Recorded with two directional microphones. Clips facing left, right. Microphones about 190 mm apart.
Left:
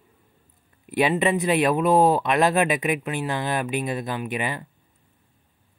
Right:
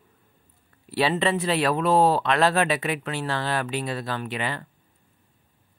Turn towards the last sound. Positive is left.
turn(degrees=15)  # may be behind; listen again after turning